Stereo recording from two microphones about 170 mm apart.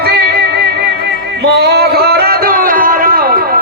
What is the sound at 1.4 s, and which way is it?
Music, 75° right (ahead or behind).